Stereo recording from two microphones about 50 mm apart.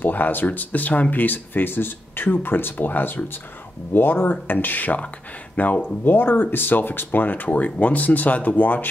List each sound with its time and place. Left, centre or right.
0.0 s speech: left